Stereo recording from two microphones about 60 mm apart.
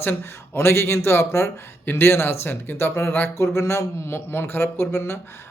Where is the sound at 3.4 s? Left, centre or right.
Left.